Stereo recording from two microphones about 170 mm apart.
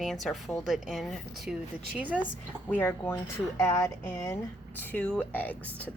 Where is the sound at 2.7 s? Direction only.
15° left (ahead or behind).